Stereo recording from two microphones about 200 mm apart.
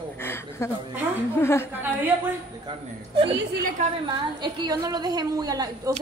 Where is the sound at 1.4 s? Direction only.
10° left (ahead or behind).